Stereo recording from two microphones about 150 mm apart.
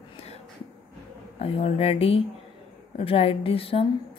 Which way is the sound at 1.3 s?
40° left (ahead or behind).